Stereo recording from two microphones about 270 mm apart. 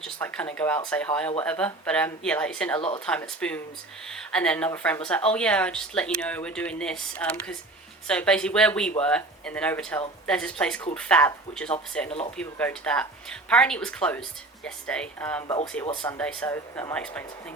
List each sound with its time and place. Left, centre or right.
0.0 s speech: centre
2.7 s speech: centre
3.1 s speech: centre